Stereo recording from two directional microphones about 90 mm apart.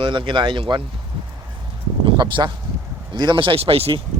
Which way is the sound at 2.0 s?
65° right (ahead or behind).